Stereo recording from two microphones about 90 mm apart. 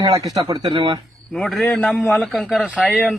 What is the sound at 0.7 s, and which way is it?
Speech, 70° right (ahead or behind).